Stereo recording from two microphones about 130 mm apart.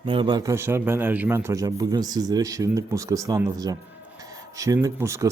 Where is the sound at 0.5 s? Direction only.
20° right (ahead or behind).